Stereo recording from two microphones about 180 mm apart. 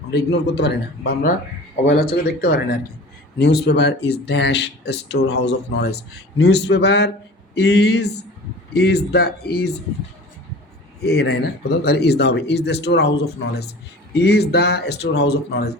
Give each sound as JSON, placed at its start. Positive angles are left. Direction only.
{"t": 0.1, "sound": "speech", "side_deg": 70}
{"t": 11.0, "sound": "speech", "side_deg": 65}